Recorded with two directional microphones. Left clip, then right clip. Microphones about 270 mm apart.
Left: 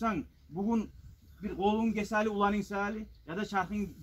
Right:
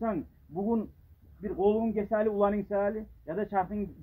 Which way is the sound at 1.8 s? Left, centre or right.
Centre.